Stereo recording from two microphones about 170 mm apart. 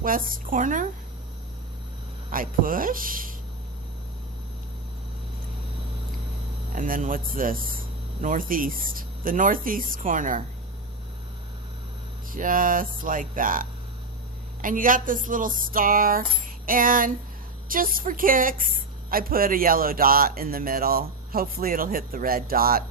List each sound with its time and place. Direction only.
0.0 s speech: 55° right (ahead or behind)
2.3 s speech: 55° right (ahead or behind)
6.7 s speech: 55° right (ahead or behind)
12.3 s speech: 55° right (ahead or behind)